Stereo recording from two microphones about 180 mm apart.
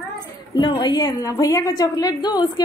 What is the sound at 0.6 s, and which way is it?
A woman's voice, 25° left (ahead or behind).